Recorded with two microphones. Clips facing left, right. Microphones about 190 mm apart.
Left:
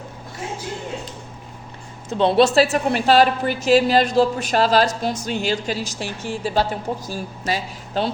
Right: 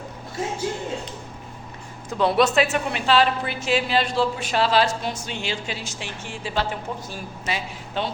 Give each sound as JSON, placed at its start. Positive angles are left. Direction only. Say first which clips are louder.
{"t": 2.0, "sound": "a woman's voice", "louder": "left 4 dB", "side_deg": 25}